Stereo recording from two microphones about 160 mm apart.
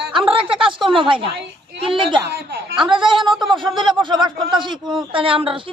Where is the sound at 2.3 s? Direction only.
90° right.